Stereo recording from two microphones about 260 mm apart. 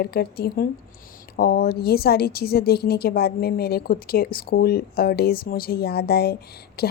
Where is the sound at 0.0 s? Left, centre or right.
Left.